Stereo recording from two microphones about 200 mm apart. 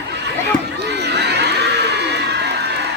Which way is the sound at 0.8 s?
55° right (ahead or behind).